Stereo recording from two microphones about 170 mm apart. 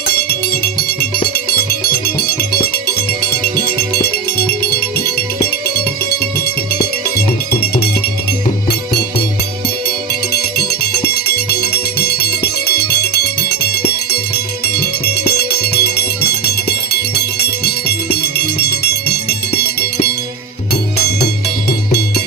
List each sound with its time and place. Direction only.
4.9 s music: 65° left (ahead or behind)
7.5 s music: 65° left (ahead or behind)
10.3 s music: 70° left (ahead or behind)
15.0 s music: 70° left (ahead or behind)
17.4 s music: 70° left (ahead or behind)
21.7 s music: 65° left (ahead or behind)